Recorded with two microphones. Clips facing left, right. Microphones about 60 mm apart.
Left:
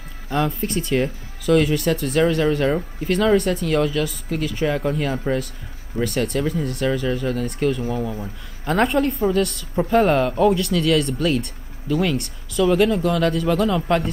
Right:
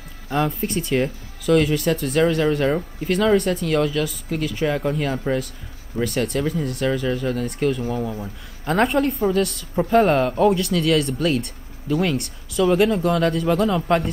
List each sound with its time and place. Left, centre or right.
0.3 s a woman's voice: centre